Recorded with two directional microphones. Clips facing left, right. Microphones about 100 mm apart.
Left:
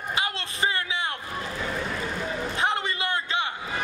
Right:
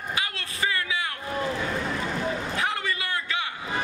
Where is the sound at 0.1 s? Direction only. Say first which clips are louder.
Left 3 dB; 25° left (ahead or behind).